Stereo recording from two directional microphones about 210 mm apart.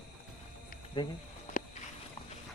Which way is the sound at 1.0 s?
20° left (ahead or behind).